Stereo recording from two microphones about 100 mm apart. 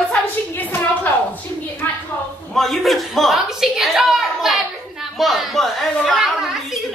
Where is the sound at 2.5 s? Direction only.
Centre (ahead or behind).